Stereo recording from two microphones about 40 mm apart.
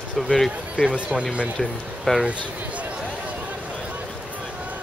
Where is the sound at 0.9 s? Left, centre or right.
Centre.